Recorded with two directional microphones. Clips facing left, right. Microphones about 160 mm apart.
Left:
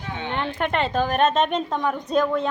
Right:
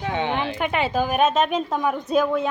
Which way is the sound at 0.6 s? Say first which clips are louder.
Left 2 dB; 5° right (ahead or behind).